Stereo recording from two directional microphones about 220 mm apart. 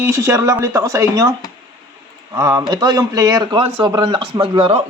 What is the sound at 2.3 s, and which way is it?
Speech, 15° right (ahead or behind).